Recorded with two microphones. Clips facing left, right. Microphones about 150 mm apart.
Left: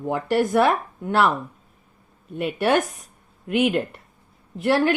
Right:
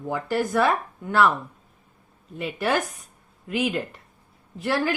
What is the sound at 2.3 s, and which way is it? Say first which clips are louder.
Speech: left 4 dB; 65° left (ahead or behind).